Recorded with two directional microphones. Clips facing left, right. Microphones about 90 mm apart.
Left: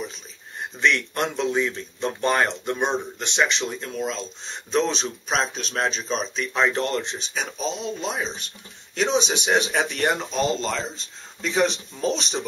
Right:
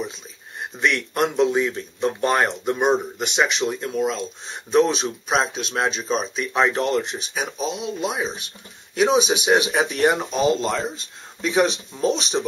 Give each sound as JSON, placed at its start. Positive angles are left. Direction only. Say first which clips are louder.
{"t": 0.7, "sound": "speech", "louder": "right 1 dB", "side_deg": -5}